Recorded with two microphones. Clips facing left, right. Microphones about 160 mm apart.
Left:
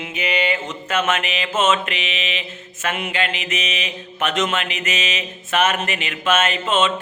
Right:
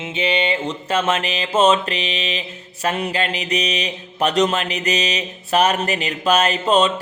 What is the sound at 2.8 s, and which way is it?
Mantra, 35° right (ahead or behind).